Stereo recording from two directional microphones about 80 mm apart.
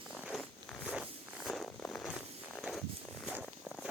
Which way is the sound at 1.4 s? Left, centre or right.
Centre.